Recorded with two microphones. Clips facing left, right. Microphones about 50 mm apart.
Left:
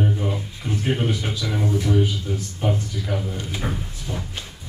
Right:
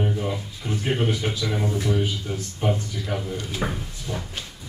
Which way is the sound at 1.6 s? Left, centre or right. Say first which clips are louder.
Left 4 dB; right.